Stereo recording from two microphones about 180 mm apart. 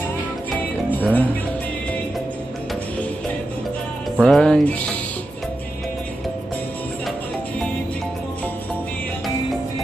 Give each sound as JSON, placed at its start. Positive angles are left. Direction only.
{"t": 0.9, "sound": "speech", "side_deg": 10}
{"t": 4.2, "sound": "speech", "side_deg": 5}